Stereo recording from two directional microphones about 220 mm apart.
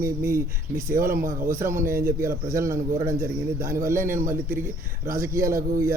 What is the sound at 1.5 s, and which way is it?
A man's voice, 10° right (ahead or behind).